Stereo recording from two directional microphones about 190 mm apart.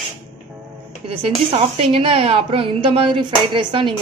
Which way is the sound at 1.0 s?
35° right (ahead or behind).